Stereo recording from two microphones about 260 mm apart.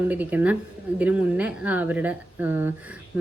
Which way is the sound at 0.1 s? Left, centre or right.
Centre.